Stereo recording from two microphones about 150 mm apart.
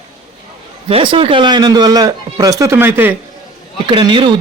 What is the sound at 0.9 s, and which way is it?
A man's voice, 35° right (ahead or behind).